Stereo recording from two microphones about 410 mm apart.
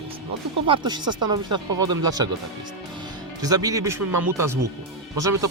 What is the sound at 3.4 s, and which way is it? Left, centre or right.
Speech, centre.